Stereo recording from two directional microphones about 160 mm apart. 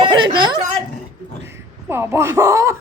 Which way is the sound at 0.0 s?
30° right (ahead or behind).